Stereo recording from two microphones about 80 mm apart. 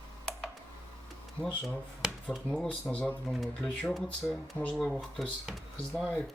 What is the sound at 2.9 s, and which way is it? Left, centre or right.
Speech, centre.